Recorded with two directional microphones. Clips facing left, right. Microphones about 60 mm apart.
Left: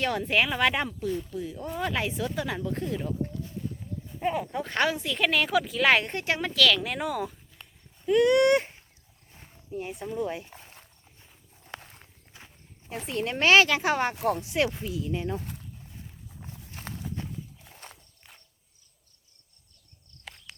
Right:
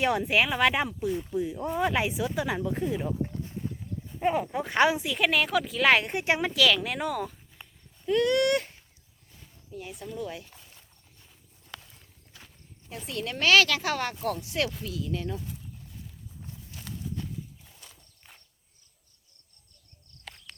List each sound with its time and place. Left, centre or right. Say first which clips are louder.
0.0 s speech: right 1 dB; centre
6.1 s speech: right 1 dB; centre
7.6 s a sound: right 1 dB; centre
8.2 s speech: left 4 dB; left
10.5 s a sound: left 5 dB; left
11.2 s walk: left 3 dB; left
11.8 s walk: left 5 dB; left
12.3 s walk: left 2 dB; left
13.1 s speech: left 2 dB; left
14.2 s speech: left 4 dB; left
14.4 s speech: left 3 dB; left
15.4 s speech: left 1 dB; left
16.5 s horse: left 2 dB; left
20.2 s a sound: even; centre